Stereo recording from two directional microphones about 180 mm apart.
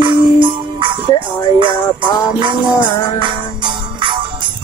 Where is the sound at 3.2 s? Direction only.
25° right (ahead or behind).